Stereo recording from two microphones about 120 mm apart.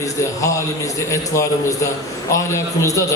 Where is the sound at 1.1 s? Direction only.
25° left (ahead or behind).